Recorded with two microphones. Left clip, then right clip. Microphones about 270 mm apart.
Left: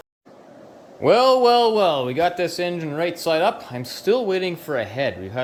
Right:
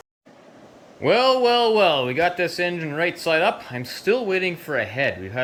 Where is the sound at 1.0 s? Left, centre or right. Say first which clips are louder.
Left 2 dB; centre.